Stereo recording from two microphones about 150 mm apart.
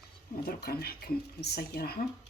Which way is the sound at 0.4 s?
90° left.